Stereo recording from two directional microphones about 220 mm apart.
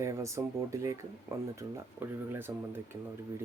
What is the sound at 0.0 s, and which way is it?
Speech, 15° right (ahead or behind).